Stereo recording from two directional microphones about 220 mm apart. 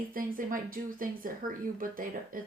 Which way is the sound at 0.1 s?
40° right (ahead or behind).